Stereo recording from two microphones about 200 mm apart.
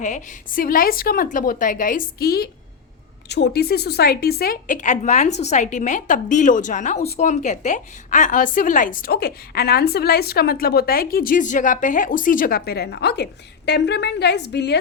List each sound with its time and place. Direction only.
0.0 s a woman's voice: 40° left (ahead or behind); by 14.8 s 60° left (ahead or behind)